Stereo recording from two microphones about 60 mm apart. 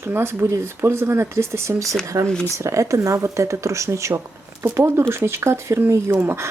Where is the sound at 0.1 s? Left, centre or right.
Right.